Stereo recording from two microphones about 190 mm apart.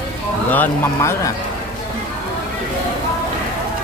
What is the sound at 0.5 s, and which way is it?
Speech, 10° left (ahead or behind).